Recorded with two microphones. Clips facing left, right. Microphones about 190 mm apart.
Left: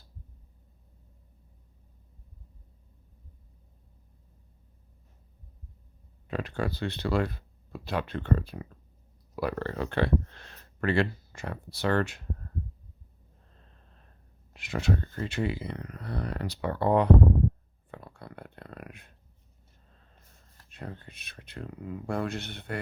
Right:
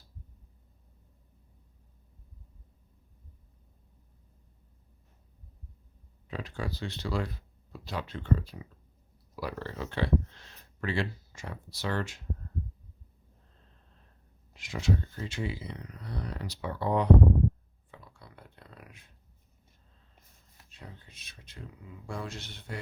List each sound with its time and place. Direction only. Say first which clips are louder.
6.2 s speech: left 5 dB; 60° left (ahead or behind)
14.5 s speech: left 2 dB; 60° left (ahead or behind)
17.9 s a sound: left 8 dB; 60° left (ahead or behind)
20.7 s speech: left 8 dB; 60° left (ahead or behind)